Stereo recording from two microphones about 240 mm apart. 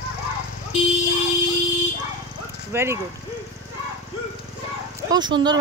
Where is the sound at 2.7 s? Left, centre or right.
Centre.